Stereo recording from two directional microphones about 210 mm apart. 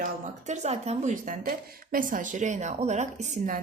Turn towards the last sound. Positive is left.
turn(degrees=-35)  # may be behind; listen again after turning